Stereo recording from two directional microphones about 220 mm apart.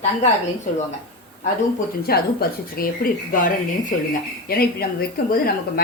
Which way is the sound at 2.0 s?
45° left (ahead or behind).